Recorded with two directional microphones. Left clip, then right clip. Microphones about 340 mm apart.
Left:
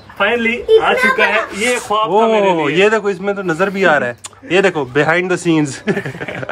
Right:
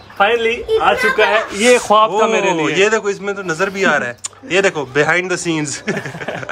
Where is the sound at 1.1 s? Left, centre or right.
Centre.